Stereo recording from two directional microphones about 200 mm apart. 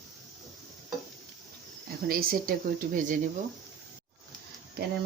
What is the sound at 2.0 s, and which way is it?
Speech, 45° right (ahead or behind).